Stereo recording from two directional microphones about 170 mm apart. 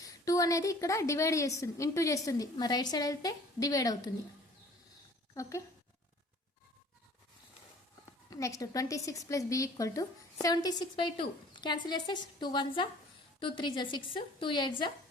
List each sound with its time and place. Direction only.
0.0 s a woman's voice: 20° left (ahead or behind)
5.3 s speech: 15° left (ahead or behind)
8.3 s a woman's voice: 20° left (ahead or behind)